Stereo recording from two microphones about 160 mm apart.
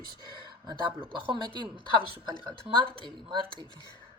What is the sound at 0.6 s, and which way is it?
A woman's voice, 30° right (ahead or behind).